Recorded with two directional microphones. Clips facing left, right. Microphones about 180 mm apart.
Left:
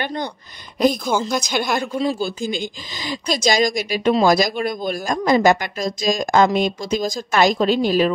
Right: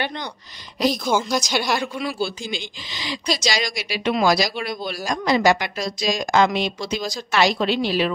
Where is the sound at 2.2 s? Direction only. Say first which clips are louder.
Left 5 dB; 45° left (ahead or behind).